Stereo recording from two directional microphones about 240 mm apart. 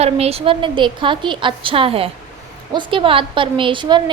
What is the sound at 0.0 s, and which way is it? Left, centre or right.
A woman's voice, right.